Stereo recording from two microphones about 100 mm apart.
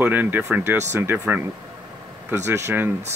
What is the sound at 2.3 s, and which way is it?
Speech, 25° right (ahead or behind).